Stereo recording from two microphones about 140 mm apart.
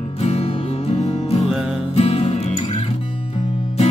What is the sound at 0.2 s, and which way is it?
Music, 50° left (ahead or behind).